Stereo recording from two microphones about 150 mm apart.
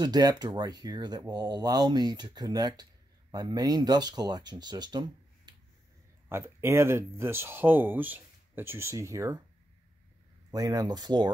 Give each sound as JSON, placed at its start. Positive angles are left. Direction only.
{"t": 0.0, "sound": "speech", "side_deg": -25}
{"t": 6.2, "sound": "speech", "side_deg": -15}
{"t": 10.5, "sound": "speech", "side_deg": -25}